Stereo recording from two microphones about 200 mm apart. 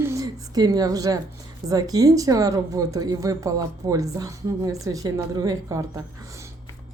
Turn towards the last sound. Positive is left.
turn(degrees=-15)  # may be behind; listen again after turning